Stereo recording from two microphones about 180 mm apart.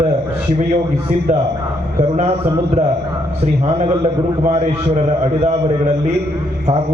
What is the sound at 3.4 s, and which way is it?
A man's voice, 35° right (ahead or behind).